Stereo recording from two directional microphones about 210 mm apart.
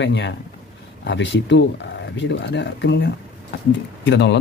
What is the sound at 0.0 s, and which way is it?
Speech, 55° left (ahead or behind).